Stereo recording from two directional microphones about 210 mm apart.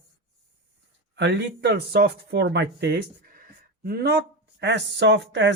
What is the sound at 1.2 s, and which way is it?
Speech, 55° right (ahead or behind).